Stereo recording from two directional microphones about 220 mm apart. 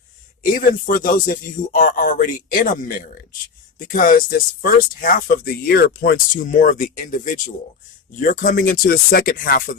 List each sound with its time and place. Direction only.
0.5 s speech: 40° left (ahead or behind)